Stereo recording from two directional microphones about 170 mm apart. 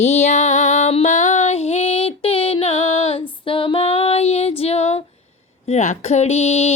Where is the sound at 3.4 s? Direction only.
30° left (ahead or behind).